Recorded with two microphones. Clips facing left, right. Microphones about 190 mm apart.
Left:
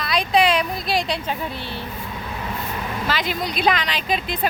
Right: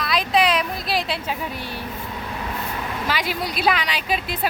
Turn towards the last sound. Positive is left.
turn(degrees=-5)  # may be behind; listen again after turning